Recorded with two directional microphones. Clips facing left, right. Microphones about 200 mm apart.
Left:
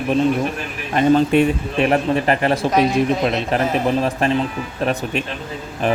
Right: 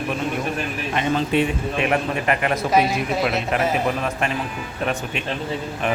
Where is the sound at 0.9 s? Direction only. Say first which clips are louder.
Left 7 dB; 45° left (ahead or behind).